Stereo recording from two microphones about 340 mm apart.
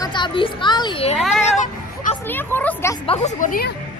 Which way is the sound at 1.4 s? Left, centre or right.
Left.